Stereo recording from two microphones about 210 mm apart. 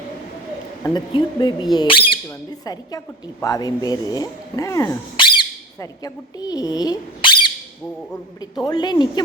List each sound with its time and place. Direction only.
0.9 s speech: 20° left (ahead or behind)
8.6 s speech: 20° left (ahead or behind)